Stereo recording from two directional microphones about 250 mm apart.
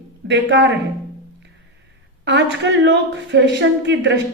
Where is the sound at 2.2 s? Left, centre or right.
Right.